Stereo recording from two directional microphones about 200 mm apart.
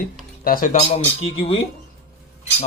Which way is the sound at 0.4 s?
45° left (ahead or behind).